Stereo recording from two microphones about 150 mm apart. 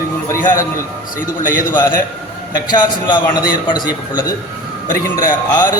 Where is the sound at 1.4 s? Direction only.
60° left (ahead or behind).